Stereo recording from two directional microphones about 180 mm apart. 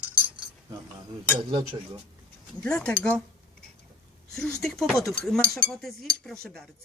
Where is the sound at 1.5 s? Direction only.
30° right (ahead or behind).